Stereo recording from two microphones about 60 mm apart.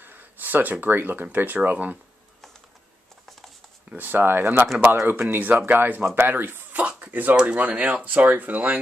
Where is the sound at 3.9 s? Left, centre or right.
Right.